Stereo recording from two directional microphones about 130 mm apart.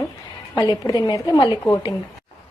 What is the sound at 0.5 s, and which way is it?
Speech, 30° left (ahead or behind).